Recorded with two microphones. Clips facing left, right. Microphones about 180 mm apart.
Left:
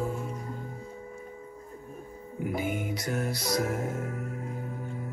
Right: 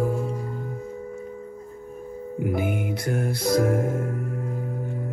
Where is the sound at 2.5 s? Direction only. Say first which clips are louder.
Right 4 dB; 55° right (ahead or behind).